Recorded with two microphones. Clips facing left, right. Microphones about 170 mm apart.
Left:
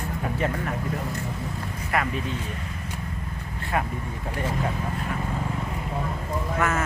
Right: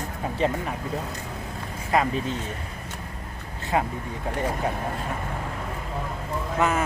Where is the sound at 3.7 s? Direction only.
20° right (ahead or behind).